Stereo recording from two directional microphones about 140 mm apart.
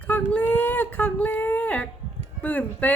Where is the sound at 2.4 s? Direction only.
10° left (ahead or behind).